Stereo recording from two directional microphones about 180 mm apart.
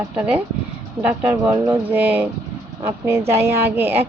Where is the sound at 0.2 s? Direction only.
5° right (ahead or behind).